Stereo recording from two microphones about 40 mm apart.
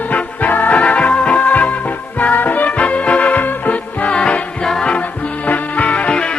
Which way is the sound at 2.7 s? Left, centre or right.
Left.